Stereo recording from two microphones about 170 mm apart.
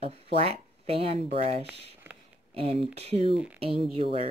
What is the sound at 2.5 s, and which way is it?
Speech, 35° right (ahead or behind).